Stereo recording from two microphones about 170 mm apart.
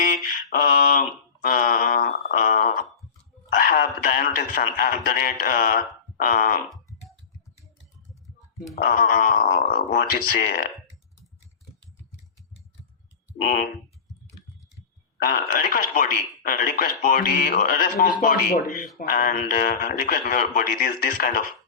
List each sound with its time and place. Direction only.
0.5 s a sound: 55° left (ahead or behind)
4.0 s speech: 55° left (ahead or behind)
8.8 s speech: 55° left (ahead or behind)
13.3 s speech: 50° left (ahead or behind)
15.2 s a man's voice: 55° left (ahead or behind)